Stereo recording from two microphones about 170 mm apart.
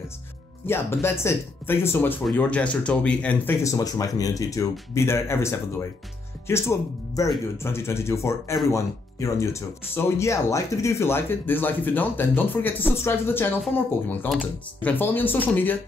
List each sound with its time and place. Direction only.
0.7 s speech: 15° left (ahead or behind)
14.8 s speech: 10° left (ahead or behind)